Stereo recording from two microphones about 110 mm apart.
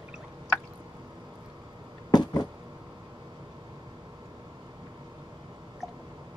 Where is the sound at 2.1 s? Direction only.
40° left (ahead or behind).